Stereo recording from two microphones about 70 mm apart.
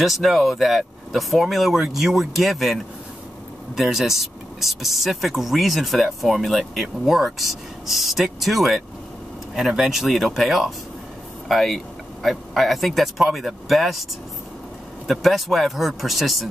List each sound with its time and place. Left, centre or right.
0.0 s speech: centre
15.0 s speech: centre